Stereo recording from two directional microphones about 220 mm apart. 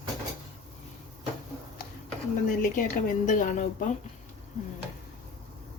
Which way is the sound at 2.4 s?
40° left (ahead or behind).